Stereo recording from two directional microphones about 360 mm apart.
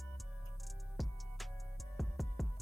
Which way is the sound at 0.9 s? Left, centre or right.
Centre.